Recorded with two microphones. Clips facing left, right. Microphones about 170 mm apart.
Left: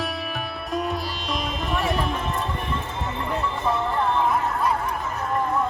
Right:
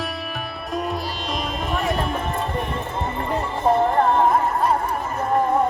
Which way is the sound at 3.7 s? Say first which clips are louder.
Right 6 dB; 50° right (ahead or behind).